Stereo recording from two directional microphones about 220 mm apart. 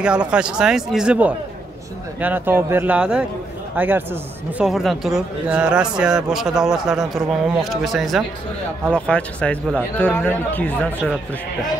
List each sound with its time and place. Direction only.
0.0 s a man's voice: 5° right (ahead or behind)